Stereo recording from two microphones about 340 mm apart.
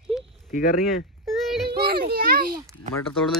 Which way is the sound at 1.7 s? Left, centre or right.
Right.